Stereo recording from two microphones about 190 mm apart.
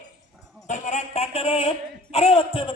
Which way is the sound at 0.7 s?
40° left (ahead or behind).